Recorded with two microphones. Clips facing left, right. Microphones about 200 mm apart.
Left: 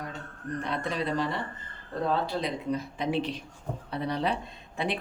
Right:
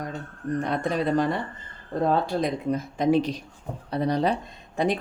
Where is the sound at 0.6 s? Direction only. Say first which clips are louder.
Right 5 dB; 45° right (ahead or behind).